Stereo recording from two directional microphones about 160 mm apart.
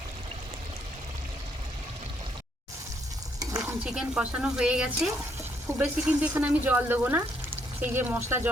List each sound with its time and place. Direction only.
3.4 s stir: 20° right (ahead or behind)
3.8 s speech: 5° right (ahead or behind)